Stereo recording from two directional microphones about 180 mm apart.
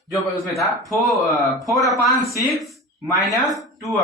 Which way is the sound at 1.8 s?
20° left (ahead or behind).